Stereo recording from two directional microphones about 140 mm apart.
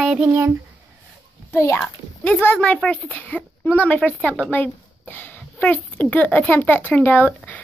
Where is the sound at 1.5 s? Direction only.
20° left (ahead or behind).